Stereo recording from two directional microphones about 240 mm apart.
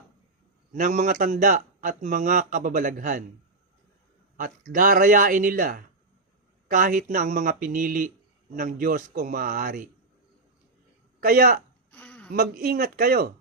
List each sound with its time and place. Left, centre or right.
0.7 s speech: right
4.4 s speech: right
11.2 s speech: right
11.9 s a sound: centre
12.3 s speech: right